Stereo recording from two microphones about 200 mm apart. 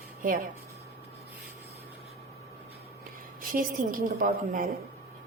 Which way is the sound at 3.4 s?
45° right (ahead or behind).